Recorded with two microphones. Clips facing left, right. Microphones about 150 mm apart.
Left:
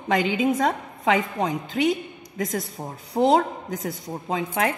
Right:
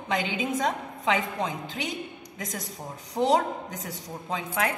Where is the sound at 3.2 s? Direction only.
45° left (ahead or behind).